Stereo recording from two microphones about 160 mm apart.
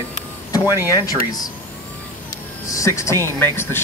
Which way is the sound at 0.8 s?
20° left (ahead or behind).